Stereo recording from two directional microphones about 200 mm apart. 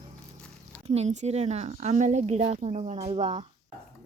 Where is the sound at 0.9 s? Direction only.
35° right (ahead or behind).